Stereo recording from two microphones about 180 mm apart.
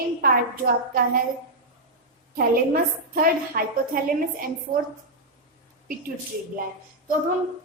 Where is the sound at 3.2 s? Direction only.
50° right (ahead or behind).